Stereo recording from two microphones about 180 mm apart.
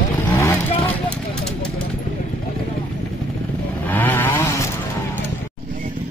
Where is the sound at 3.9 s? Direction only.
10° left (ahead or behind).